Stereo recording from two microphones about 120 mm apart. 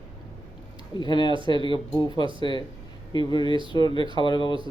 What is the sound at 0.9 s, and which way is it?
Speech, 40° left (ahead or behind).